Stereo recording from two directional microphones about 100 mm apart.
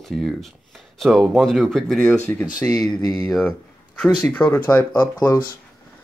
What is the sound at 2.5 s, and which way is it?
Speech, 35° left (ahead or behind).